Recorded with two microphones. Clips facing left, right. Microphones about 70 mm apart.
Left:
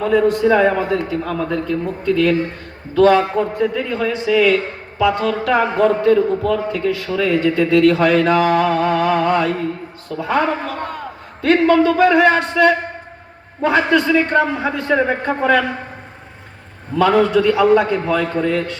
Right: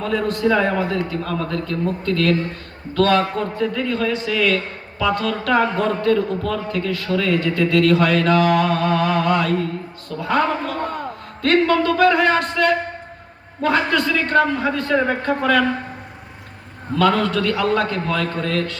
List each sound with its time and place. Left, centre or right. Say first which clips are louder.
0.0 s a man's voice: left 5 dB; centre
17.0 s a man's voice: left 4 dB; centre